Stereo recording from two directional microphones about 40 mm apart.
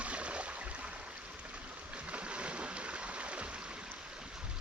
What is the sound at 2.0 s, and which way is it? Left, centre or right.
Boat, right.